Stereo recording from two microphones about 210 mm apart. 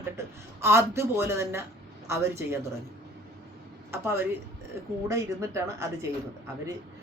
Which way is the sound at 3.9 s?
10° right (ahead or behind).